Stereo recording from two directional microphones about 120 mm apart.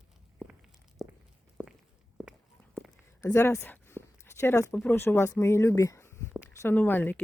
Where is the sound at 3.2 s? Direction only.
25° left (ahead or behind).